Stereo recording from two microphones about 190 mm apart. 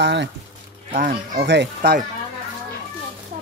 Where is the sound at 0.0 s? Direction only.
65° right (ahead or behind).